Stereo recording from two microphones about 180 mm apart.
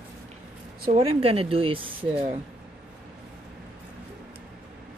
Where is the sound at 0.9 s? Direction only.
35° right (ahead or behind).